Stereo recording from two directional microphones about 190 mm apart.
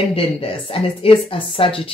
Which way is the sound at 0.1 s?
30° left (ahead or behind).